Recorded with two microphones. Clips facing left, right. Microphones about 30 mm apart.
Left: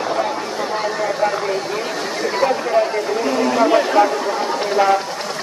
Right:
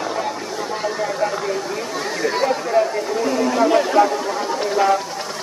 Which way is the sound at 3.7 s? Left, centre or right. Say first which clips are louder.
Even; centre.